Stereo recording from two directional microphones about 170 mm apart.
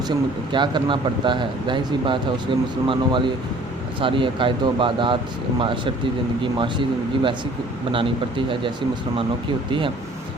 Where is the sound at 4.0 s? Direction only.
30° right (ahead or behind).